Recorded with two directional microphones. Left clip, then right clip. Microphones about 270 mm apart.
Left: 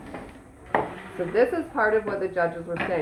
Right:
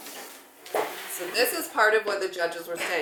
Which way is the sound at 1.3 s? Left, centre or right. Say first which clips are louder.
Left 3 dB; right.